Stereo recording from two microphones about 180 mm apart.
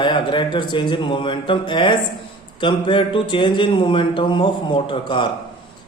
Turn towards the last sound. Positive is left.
turn(degrees=25)  # may be behind; listen again after turning